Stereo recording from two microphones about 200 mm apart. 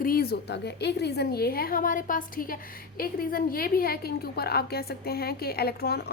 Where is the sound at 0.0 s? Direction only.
50° left (ahead or behind).